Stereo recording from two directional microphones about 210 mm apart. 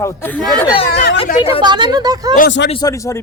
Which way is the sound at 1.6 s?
20° right (ahead or behind).